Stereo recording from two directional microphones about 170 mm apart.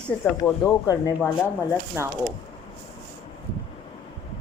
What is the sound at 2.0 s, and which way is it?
Speech, 15° right (ahead or behind).